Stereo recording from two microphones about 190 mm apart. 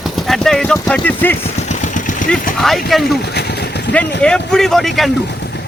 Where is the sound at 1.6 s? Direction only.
40° left (ahead or behind).